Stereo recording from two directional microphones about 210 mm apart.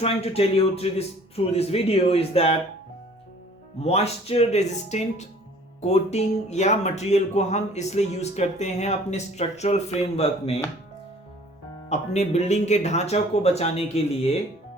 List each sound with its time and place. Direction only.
0.0 s speech: 30° left (ahead or behind)
3.8 s speech: 30° left (ahead or behind)
11.9 s speech: 30° left (ahead or behind)